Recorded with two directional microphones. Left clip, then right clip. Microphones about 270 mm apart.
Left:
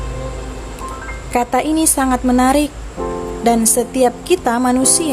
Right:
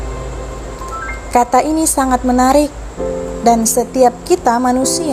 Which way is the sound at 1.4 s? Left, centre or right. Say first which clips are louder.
Right 4 dB; centre.